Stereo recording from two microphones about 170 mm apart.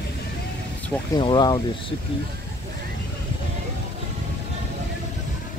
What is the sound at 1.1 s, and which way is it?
Speech, 25° left (ahead or behind).